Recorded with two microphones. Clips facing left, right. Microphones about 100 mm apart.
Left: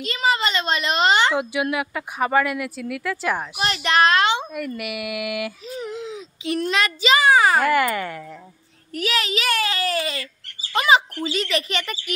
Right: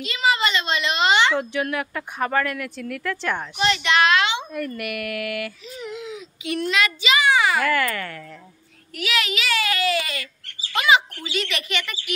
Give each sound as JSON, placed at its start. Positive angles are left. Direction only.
{"t": 0.0, "sound": "speech", "side_deg": 40}
{"t": 1.3, "sound": "speech", "side_deg": 10}
{"t": 3.6, "sound": "speech", "side_deg": 40}
{"t": 4.5, "sound": "speech", "side_deg": 5}
{"t": 5.8, "sound": "a child's voice", "side_deg": 35}
{"t": 7.7, "sound": "speech", "side_deg": 20}
{"t": 8.9, "sound": "speech", "side_deg": 35}